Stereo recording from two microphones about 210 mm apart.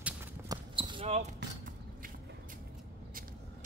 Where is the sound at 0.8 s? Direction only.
25° right (ahead or behind).